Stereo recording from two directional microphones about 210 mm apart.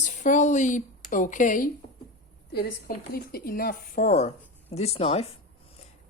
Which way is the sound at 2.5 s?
45° left (ahead or behind).